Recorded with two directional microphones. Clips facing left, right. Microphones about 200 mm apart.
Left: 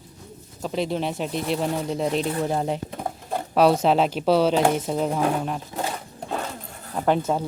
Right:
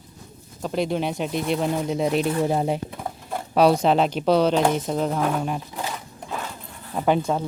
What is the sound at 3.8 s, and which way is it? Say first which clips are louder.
Speech: even; 5° left (ahead or behind).